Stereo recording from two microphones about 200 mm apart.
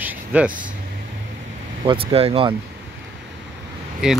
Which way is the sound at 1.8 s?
25° right (ahead or behind).